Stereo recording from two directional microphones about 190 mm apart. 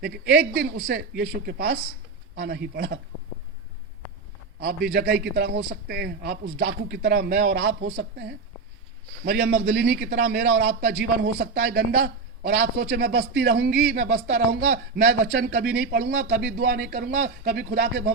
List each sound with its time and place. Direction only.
0.0 s a man's voice: 60° right (ahead or behind)
4.6 s a man's voice: 60° right (ahead or behind)
9.2 s a man's voice: 55° right (ahead or behind)